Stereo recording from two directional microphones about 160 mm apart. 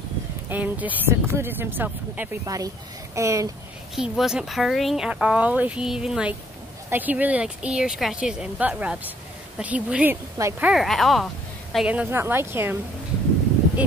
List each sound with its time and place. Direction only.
0.5 s speech: 10° right (ahead or behind)
3.9 s speech: 5° right (ahead or behind)
10.3 s speech: 20° right (ahead or behind)
10.7 s speech: centre (ahead or behind)